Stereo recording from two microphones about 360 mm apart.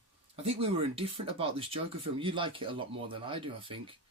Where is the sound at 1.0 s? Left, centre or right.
Centre.